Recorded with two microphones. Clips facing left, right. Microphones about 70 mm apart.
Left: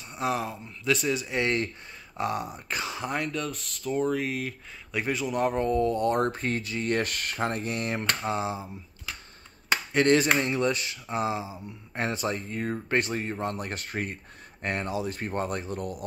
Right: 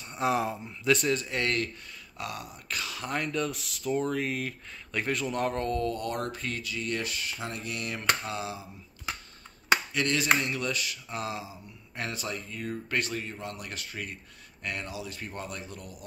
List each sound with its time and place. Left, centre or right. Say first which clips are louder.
0.0 s speech: right 1 dB; centre
1.4 s speech: left 3 dB; left
3.1 s speech: right 2 dB; centre; by 6.1 s left
6.1 s speech: left 7 dB; left
9.9 s speech: left 5 dB; left